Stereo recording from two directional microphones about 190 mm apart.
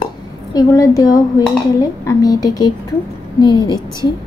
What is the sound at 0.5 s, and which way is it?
A woman's voice, 20° left (ahead or behind).